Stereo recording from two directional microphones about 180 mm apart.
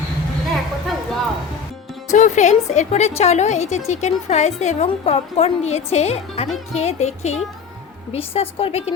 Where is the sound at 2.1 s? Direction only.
40° left (ahead or behind).